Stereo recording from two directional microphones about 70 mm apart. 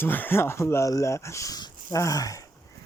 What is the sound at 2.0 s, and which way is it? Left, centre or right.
Speech, left.